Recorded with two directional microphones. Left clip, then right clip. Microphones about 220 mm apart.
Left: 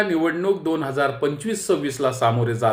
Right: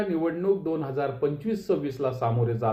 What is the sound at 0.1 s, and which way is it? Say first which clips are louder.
Speech: left 5 dB; 35° left (ahead or behind).